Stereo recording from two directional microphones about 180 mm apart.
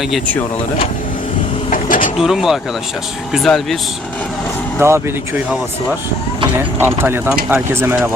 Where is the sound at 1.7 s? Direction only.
45° left (ahead or behind).